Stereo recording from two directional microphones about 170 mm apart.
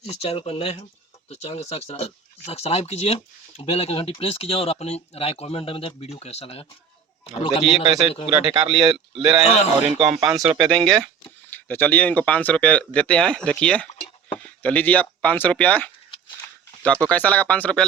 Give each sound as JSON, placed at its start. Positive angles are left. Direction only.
{"t": 0.0, "sound": "speech", "side_deg": 40}
{"t": 8.3, "sound": "a man's voice", "side_deg": -30}
{"t": 9.4, "sound": "speech", "side_deg": 40}
{"t": 10.1, "sound": "speech", "side_deg": 0}